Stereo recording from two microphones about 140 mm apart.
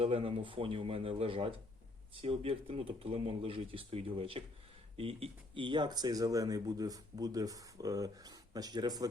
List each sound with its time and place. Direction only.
0.0 s speech: 40° right (ahead or behind)